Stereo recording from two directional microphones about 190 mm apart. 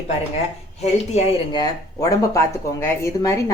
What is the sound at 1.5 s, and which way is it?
Speech, 20° left (ahead or behind).